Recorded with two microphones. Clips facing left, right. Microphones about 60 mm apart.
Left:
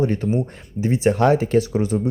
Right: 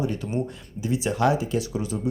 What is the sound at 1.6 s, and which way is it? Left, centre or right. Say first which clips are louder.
Speech: left 8 dB; left.